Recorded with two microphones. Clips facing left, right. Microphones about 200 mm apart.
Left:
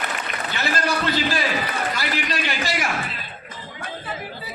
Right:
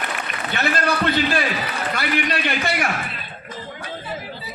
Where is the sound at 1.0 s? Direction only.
55° right (ahead or behind).